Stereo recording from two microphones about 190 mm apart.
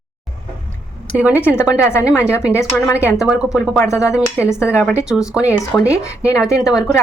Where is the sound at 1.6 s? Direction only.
15° left (ahead or behind).